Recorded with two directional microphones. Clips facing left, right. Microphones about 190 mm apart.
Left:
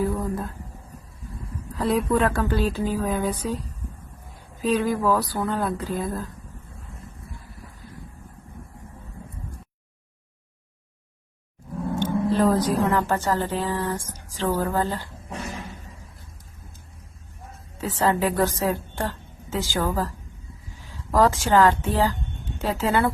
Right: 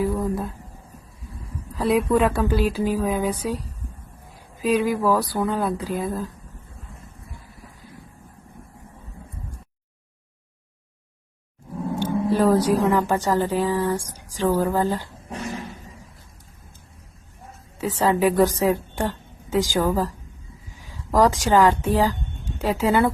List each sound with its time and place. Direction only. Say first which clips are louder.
0.0 s a sound: right 2 dB; 5° right (ahead or behind)
1.8 s speech: right 2 dB; 10° right (ahead or behind)
4.6 s speech: right 2 dB; 10° right (ahead or behind)
11.9 s a woman's voice: right 1 dB; 10° right (ahead or behind)
17.7 s a woman's voice: right 2 dB; 10° right (ahead or behind)